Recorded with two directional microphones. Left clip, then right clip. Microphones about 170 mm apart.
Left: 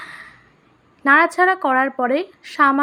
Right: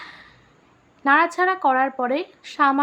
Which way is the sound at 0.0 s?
20° left (ahead or behind).